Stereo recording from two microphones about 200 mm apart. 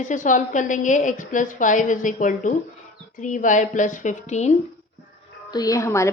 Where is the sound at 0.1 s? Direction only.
40° left (ahead or behind).